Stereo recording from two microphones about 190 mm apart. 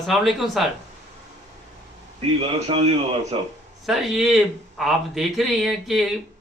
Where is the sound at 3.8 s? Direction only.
Centre (ahead or behind).